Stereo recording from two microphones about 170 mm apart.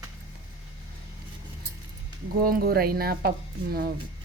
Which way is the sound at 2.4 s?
60° right (ahead or behind).